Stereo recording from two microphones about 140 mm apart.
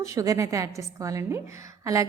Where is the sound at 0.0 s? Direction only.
25° right (ahead or behind).